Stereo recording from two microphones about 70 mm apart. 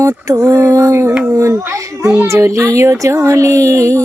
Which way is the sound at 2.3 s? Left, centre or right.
Right.